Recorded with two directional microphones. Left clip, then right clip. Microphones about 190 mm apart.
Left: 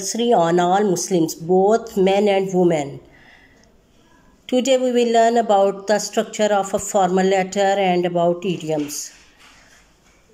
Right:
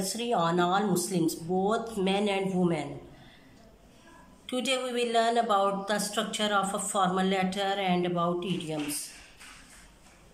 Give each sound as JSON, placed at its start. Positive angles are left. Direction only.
{"t": 0.0, "sound": "speech", "side_deg": 35}
{"t": 4.5, "sound": "speech", "side_deg": 35}